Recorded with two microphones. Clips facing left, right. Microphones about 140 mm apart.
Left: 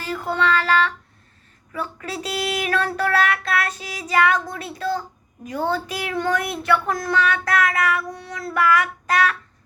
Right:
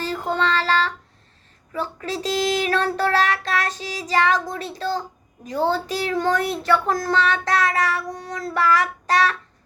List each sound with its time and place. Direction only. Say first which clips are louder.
0.0 s child singing: even; 30° right (ahead or behind)